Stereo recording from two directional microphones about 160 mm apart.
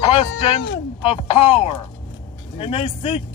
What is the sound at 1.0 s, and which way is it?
A man's voice, 35° left (ahead or behind).